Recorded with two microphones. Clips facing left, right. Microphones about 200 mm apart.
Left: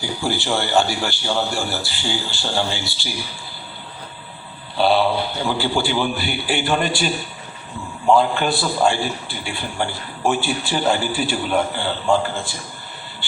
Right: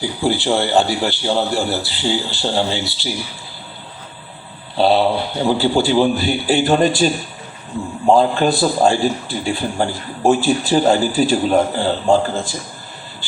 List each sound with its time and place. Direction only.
0.0 s a man's voice: 30° right (ahead or behind)
5.4 s a man's voice: 35° right (ahead or behind)